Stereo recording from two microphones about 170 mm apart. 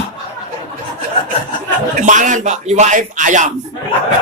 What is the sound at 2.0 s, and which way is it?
A man's voice, 45° right (ahead or behind).